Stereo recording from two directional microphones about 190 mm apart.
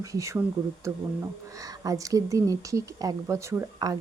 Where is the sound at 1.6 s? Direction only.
20° right (ahead or behind).